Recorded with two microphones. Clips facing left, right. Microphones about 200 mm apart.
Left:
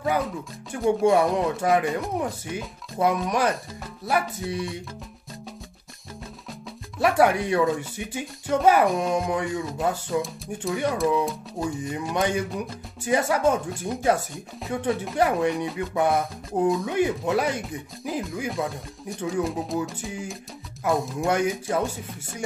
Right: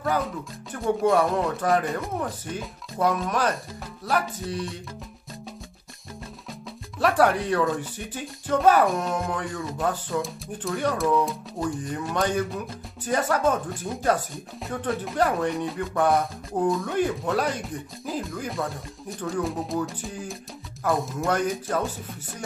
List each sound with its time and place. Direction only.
1.0 s speech: 15° left (ahead or behind)
7.0 s speech: 10° left (ahead or behind)
21.4 s speech: 10° left (ahead or behind)